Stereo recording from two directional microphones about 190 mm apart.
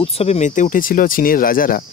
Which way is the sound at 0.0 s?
35° left (ahead or behind).